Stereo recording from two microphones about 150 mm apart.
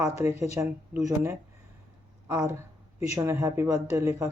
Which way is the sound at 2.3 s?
20° right (ahead or behind).